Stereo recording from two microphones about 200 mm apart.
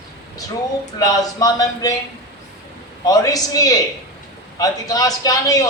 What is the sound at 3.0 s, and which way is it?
A man's voice, 20° left (ahead or behind).